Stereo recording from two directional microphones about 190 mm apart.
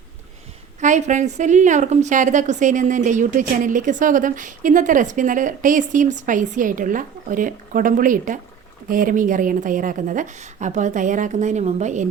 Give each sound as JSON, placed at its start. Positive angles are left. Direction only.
{"t": 0.8, "sound": "a woman's voice", "side_deg": -40}